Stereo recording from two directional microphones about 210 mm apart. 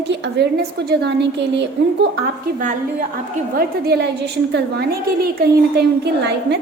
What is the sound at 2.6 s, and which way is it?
A woman's voice, 40° right (ahead or behind).